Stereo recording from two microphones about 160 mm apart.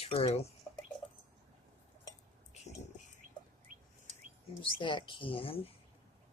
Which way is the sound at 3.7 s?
60° right (ahead or behind).